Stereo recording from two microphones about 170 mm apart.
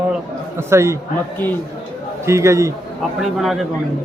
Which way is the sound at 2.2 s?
15° right (ahead or behind).